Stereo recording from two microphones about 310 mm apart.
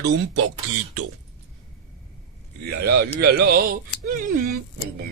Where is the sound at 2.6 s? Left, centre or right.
Right.